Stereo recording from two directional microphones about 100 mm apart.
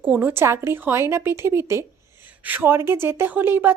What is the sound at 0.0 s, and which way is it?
A woman's voice, 20° right (ahead or behind).